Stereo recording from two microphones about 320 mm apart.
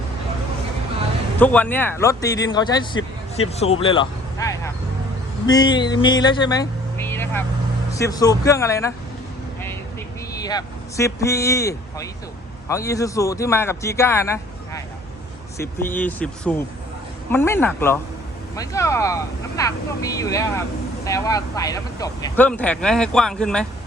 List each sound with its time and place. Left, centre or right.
1.4 s speech: centre
10.4 s speech: centre